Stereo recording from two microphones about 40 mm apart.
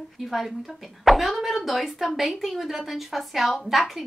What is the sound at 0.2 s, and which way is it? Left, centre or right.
Speech, centre.